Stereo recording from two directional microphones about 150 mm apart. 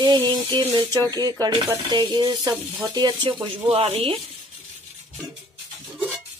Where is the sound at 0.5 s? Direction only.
35° right (ahead or behind).